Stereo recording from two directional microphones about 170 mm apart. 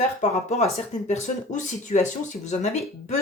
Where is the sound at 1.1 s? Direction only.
45° left (ahead or behind).